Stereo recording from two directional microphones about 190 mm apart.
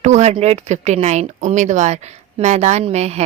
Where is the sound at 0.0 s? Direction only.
35° right (ahead or behind).